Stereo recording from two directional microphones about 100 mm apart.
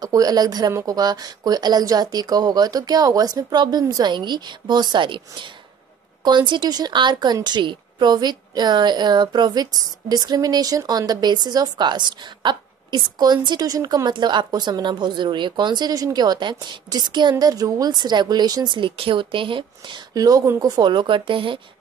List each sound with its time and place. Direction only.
0.0 s speech: 40° right (ahead or behind)
13.7 s speech: 35° right (ahead or behind); by 20.0 s 55° right (ahead or behind)
20.2 s speech: 35° right (ahead or behind); by 21.5 s 55° right (ahead or behind)